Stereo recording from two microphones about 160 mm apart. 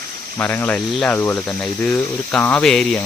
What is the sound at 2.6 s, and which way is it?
Speech, centre (ahead or behind).